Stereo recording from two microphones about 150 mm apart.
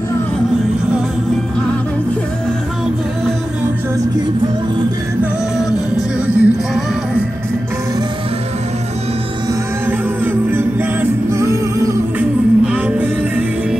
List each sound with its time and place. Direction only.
5.9 s music: 10° right (ahead or behind)
9.8 s music: 15° right (ahead or behind)
12.2 s music: 10° right (ahead or behind)